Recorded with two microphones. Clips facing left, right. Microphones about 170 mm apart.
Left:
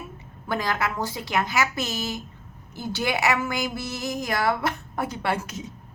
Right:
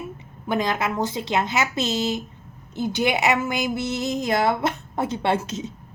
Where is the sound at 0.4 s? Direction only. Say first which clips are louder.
Right 3 dB; 20° right (ahead or behind).